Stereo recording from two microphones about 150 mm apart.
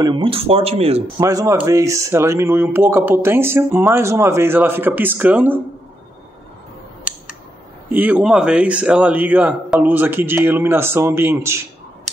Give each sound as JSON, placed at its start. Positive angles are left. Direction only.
{"t": 0.0, "sound": "speech", "side_deg": -35}
{"t": 1.2, "sound": "a man's voice", "side_deg": -25}
{"t": 7.9, "sound": "speech", "side_deg": -10}